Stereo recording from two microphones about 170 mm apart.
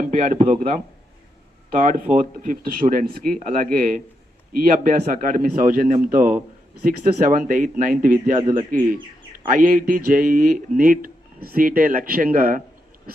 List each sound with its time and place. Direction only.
0.1 s a man's voice: 45° right (ahead or behind)